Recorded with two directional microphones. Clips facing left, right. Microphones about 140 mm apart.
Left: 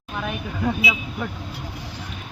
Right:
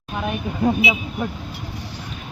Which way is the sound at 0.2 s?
25° right (ahead or behind).